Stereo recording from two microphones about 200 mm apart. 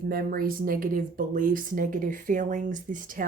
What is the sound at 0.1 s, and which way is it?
Speech, 45° right (ahead or behind).